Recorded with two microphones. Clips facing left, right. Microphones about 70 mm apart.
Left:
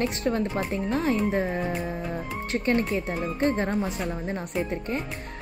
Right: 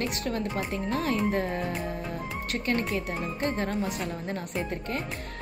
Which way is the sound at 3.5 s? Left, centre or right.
Left.